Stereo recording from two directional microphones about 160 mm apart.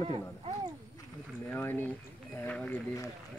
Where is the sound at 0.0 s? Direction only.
35° right (ahead or behind).